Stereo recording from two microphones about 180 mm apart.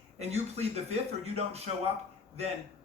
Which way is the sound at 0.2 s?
35° right (ahead or behind).